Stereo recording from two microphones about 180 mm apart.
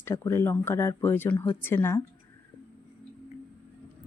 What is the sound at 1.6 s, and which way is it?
Speech, 10° left (ahead or behind).